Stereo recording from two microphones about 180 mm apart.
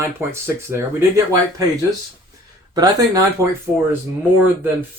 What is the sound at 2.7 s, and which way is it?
Speech, 20° right (ahead or behind).